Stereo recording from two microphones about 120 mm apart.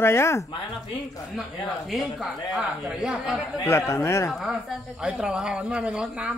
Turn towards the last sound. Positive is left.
turn(degrees=-10)  # may be behind; listen again after turning